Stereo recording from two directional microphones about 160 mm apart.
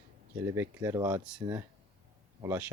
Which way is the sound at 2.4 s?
15° right (ahead or behind).